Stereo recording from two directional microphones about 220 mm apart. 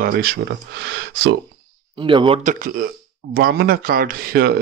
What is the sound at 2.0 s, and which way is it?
Speech, 25° right (ahead or behind).